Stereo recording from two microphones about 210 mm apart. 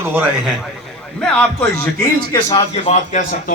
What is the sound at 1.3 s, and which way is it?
Speech, 5° left (ahead or behind).